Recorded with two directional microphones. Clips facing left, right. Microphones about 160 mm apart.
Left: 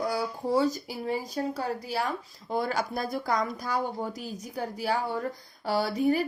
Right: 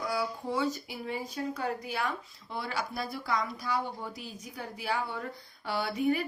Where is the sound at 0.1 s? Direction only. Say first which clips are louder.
Left 5 dB; 40° left (ahead or behind).